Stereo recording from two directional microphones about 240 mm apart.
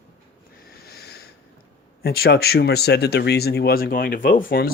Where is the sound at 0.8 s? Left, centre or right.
Left.